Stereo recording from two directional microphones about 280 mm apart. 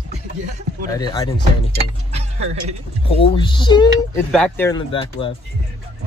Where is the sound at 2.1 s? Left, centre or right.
Right.